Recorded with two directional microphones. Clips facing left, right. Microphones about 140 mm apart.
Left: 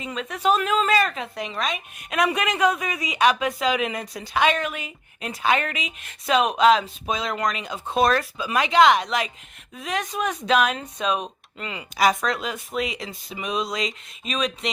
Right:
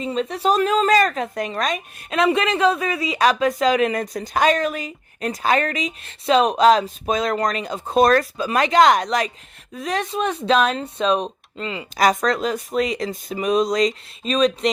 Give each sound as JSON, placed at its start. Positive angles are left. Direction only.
{"t": 0.0, "sound": "speech", "side_deg": -35}
{"t": 2.0, "sound": "speech", "side_deg": -25}
{"t": 11.9, "sound": "speech", "side_deg": -40}